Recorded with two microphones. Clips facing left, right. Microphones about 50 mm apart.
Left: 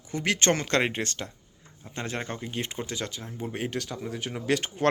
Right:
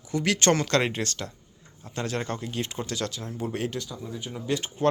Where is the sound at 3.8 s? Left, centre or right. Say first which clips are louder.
Left 2 dB; left.